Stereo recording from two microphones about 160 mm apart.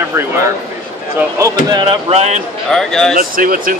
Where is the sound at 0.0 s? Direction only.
15° right (ahead or behind).